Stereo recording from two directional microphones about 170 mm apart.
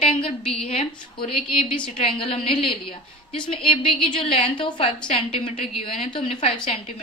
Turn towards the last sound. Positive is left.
turn(degrees=35)  # may be behind; listen again after turning